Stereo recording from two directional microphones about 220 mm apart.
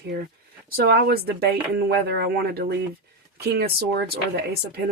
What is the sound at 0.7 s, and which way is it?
Speech, 45° right (ahead or behind).